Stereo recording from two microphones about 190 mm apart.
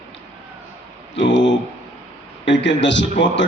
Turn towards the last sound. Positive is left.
turn(degrees=70)  # may be behind; listen again after turning